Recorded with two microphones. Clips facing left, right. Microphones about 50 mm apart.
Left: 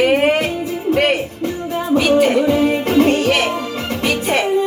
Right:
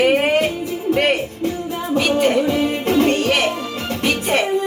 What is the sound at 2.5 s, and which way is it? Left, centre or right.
Music, left.